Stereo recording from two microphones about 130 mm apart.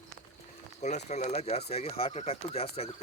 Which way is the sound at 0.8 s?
60° left (ahead or behind).